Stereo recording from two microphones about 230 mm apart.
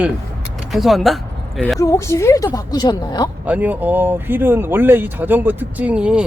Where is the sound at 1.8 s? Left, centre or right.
Centre.